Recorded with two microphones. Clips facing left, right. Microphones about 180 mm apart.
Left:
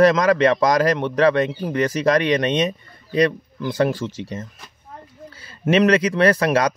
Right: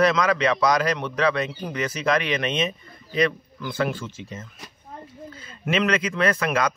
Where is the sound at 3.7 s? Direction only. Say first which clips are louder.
Left 6 dB; 40° left (ahead or behind).